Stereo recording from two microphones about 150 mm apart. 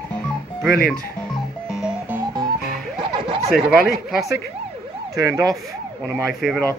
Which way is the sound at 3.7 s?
Centre (ahead or behind).